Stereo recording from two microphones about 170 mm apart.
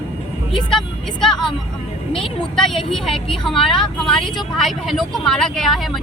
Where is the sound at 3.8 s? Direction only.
5° left (ahead or behind).